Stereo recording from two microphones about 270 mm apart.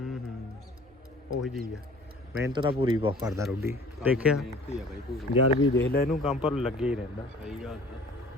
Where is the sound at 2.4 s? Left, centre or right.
Centre.